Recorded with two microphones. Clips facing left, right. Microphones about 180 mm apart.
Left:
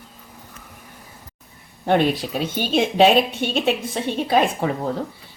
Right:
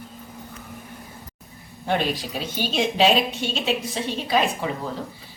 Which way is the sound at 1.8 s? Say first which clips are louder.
Left 6 dB; 55° left (ahead or behind).